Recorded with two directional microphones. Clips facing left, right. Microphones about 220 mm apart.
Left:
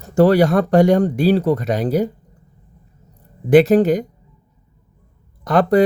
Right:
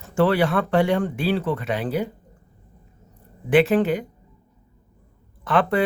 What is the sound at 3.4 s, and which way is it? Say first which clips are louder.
Speech: left 6 dB; 40° left (ahead or behind).